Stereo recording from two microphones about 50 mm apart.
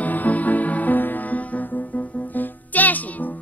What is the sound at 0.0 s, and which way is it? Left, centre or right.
Music, left.